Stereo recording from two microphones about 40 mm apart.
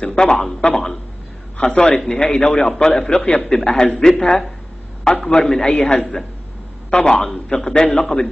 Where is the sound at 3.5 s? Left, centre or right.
Centre.